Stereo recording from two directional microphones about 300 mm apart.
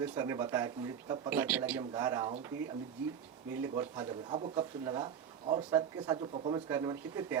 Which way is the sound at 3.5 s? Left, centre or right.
Centre.